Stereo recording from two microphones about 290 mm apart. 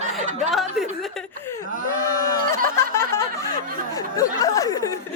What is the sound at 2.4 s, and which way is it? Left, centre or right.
Speech, right.